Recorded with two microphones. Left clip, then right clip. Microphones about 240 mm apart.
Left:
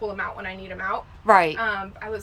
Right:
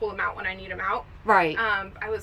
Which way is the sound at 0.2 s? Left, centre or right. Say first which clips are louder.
Right 2 dB; centre.